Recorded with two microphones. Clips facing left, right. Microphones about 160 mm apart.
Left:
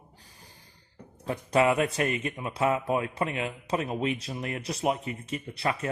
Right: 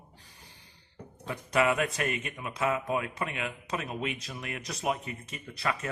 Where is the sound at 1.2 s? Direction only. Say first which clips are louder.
Left 3 dB; 35° left (ahead or behind).